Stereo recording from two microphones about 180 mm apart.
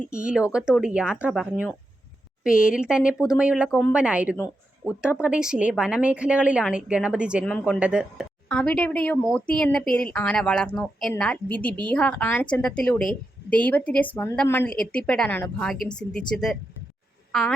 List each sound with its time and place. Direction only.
0.1 s a woman's voice: 5° right (ahead or behind)
8.4 s speech: 5° left (ahead or behind)